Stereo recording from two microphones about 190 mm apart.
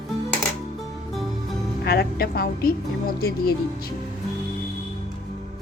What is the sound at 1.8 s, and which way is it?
A woman's voice, 55° left (ahead or behind).